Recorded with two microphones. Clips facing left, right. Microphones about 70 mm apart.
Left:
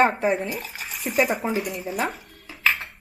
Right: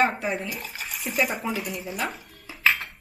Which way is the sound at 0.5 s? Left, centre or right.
Centre.